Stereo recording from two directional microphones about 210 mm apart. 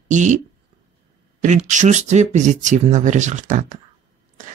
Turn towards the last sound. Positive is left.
turn(degrees=-35)  # may be behind; listen again after turning